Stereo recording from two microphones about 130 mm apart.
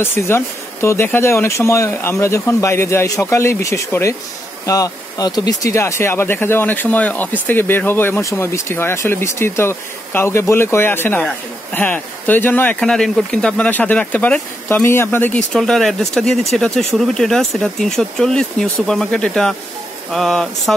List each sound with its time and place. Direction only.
0.0 s speech: 20° left (ahead or behind)
12.8 s speech: 5° left (ahead or behind)